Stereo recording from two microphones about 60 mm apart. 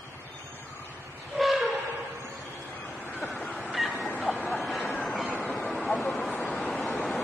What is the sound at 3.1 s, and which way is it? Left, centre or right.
Waves, left.